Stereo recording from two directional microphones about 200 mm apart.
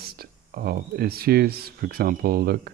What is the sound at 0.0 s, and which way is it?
Speech, 50° right (ahead or behind).